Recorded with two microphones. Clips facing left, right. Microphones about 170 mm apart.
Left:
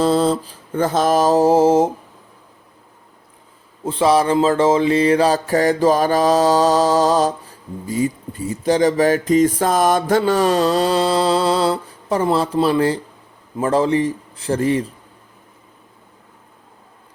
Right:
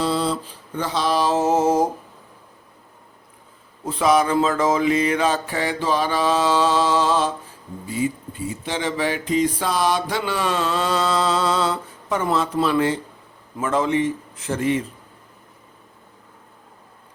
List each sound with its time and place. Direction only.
0.0 s mantra: 45° left (ahead or behind); by 1.9 s 30° left (ahead or behind)
3.8 s speech: 30° left (ahead or behind)